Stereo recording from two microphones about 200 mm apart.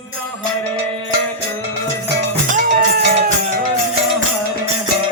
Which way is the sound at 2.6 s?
50° right (ahead or behind).